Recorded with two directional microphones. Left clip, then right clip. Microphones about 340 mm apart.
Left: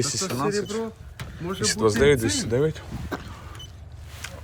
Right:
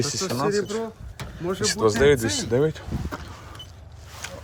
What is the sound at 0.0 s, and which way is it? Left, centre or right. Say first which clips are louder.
Speech: right 1 dB; centre.